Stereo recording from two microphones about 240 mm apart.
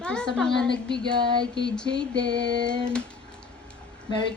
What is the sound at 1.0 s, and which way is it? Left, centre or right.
Speech, right.